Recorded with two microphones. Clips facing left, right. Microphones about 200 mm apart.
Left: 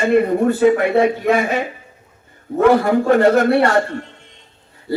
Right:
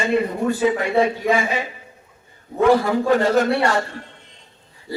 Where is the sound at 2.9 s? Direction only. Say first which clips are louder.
Left 5 dB; 55° left (ahead or behind).